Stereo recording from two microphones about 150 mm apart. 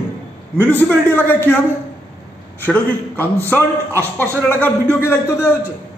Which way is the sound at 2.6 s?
15° left (ahead or behind).